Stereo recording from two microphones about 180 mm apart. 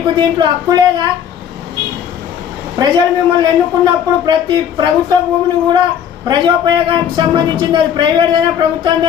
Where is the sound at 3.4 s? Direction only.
25° right (ahead or behind).